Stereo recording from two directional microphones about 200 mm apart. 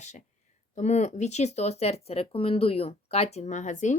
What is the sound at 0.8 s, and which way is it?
Speech, 35° left (ahead or behind).